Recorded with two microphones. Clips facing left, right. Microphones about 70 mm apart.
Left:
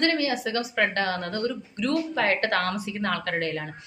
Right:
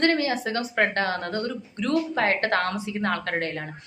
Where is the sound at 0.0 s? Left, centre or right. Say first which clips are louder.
Right 2 dB; right.